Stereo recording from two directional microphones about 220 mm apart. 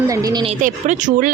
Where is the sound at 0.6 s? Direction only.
35° right (ahead or behind).